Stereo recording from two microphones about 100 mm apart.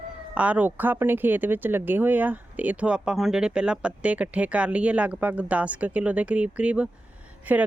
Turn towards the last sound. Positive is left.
turn(degrees=-15)  # may be behind; listen again after turning